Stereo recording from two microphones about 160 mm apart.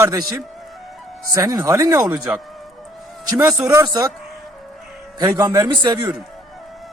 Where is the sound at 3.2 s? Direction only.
25° right (ahead or behind).